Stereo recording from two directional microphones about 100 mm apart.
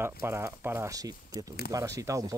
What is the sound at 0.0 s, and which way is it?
Speech, 25° right (ahead or behind).